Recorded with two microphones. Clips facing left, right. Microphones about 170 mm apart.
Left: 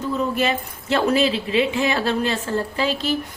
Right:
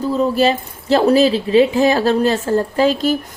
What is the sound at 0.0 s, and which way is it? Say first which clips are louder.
Speech: right 7 dB; 35° right (ahead or behind).